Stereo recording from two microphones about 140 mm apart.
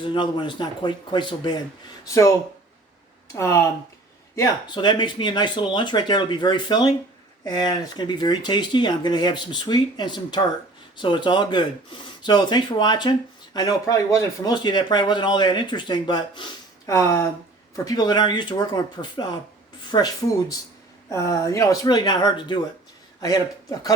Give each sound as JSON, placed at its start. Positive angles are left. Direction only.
{"t": 0.0, "sound": "speech", "side_deg": 35}
{"t": 2.0, "sound": "speech", "side_deg": 20}
{"t": 3.3, "sound": "speech", "side_deg": 20}
{"t": 21.1, "sound": "speech", "side_deg": 20}